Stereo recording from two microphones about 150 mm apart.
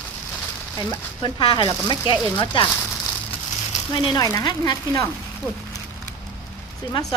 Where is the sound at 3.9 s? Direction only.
30° left (ahead or behind).